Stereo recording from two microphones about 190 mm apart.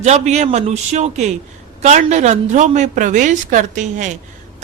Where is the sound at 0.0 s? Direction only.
35° right (ahead or behind).